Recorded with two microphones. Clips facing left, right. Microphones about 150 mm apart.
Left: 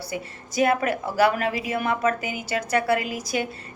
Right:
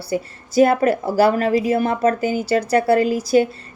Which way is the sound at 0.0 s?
30° right (ahead or behind).